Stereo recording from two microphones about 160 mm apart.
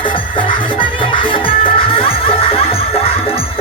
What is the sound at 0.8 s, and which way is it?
Music, 30° left (ahead or behind).